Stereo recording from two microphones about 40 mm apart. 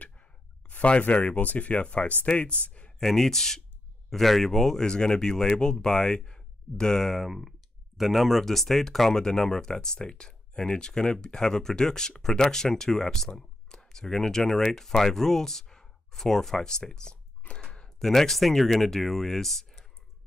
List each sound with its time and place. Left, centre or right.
0.0 s sigh: left
1.0 s speech: left
3.0 s speech: centre
7.2 s speech: centre